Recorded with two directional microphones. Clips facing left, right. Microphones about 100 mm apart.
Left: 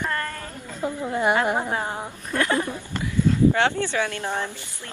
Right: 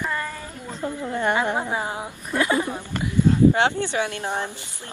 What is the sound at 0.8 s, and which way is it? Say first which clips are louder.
Speech: left 1 dB; 15° left (ahead or behind).